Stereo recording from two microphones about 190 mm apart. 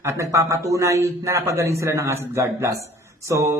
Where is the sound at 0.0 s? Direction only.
15° right (ahead or behind).